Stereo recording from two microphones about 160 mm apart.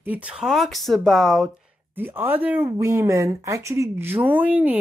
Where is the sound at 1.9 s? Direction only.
15° right (ahead or behind).